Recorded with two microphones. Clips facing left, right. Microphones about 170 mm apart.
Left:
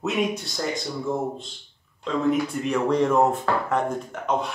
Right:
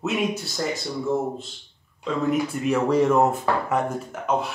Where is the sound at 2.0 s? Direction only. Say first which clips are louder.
Left 1 dB; 5° right (ahead or behind).